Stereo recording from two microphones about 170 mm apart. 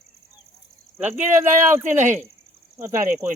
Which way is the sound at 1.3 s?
15° right (ahead or behind).